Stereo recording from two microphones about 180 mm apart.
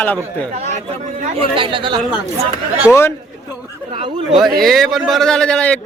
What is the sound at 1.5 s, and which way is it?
Speech, 25° right (ahead or behind).